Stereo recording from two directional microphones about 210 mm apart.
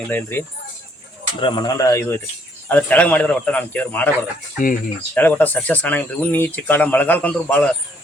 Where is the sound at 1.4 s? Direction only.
20° left (ahead or behind).